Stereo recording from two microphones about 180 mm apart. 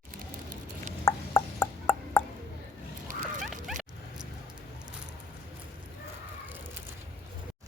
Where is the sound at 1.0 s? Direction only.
15° left (ahead or behind).